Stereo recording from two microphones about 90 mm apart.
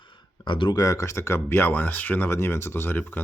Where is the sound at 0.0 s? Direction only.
65° left (ahead or behind).